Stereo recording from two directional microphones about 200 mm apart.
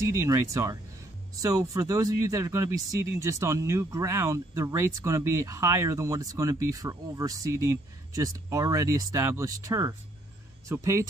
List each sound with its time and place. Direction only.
0.0 s speech: 15° right (ahead or behind)